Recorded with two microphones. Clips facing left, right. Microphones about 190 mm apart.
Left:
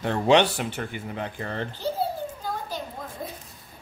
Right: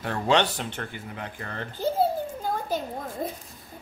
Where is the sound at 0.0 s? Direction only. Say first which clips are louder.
Left 4 dB; 20° left (ahead or behind).